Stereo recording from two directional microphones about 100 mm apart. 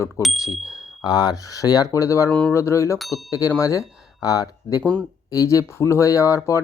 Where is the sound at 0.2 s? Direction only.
30° left (ahead or behind).